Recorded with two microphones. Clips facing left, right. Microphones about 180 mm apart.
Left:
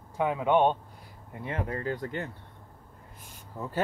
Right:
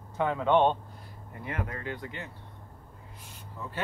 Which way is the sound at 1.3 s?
25° left (ahead or behind).